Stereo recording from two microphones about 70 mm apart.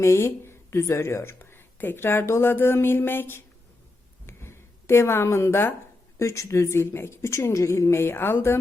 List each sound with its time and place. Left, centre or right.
0.0 s speech: left
4.3 s a sound: left
6.1 s speech: left